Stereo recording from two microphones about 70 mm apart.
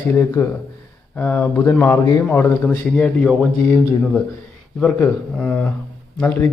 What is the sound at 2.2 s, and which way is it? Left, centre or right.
Speech, left.